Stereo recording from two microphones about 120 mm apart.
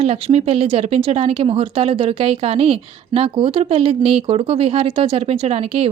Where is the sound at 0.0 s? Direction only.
60° right (ahead or behind).